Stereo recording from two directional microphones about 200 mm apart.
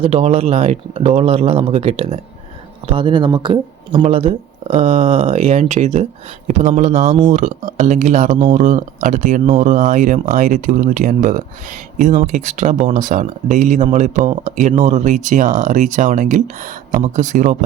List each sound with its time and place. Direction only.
0.0 s speech: 30° right (ahead or behind)